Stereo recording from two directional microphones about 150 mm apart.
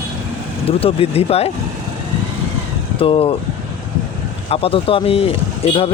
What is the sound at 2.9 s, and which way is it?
Speech, 40° left (ahead or behind).